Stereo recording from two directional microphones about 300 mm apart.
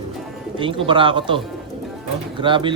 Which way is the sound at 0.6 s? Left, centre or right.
Centre.